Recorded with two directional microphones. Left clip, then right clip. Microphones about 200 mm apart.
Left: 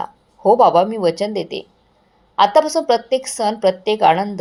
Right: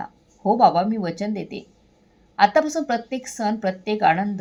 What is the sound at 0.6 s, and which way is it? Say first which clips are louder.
A woman's voice: left 1 dB; 15° left (ahead or behind).